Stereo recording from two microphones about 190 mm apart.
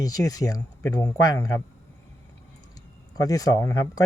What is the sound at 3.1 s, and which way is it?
Speech, 20° left (ahead or behind).